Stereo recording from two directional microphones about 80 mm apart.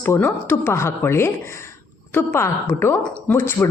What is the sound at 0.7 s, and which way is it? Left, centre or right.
A woman's voice, left.